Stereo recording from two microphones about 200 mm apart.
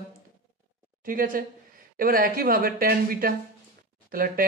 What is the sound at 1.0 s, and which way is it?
Speech, 45° right (ahead or behind).